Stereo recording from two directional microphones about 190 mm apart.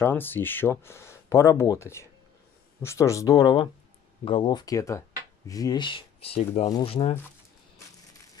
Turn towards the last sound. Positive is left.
turn(degrees=30)  # may be behind; listen again after turning